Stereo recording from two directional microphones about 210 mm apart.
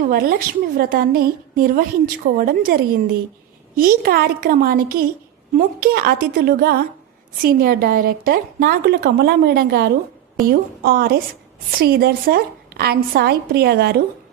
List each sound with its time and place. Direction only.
0.0 s a woman's voice: 45° right (ahead or behind)